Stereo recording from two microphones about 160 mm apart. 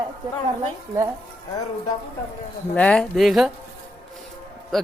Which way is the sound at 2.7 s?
5° left (ahead or behind).